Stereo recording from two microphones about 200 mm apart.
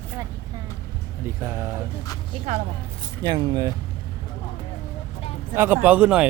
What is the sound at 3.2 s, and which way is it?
Speech, 20° right (ahead or behind).